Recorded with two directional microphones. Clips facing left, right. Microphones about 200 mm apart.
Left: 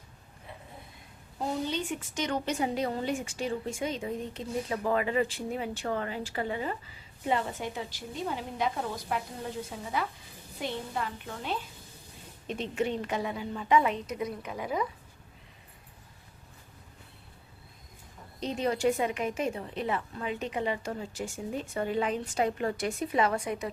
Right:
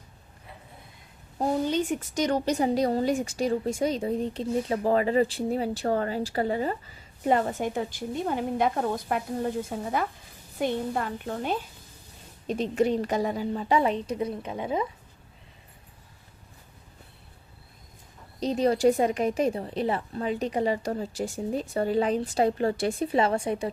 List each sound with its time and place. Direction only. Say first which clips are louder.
1.4 s a woman's voice: right 6 dB; 45° right (ahead or behind)
7.3 s a woman's voice: right 6 dB; 50° right (ahead or behind); by 14.8 s 25° right (ahead or behind)
18.3 s a woman's voice: right 6 dB; 35° right (ahead or behind)